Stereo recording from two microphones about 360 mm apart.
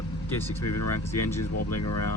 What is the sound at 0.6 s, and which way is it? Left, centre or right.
Speech, left.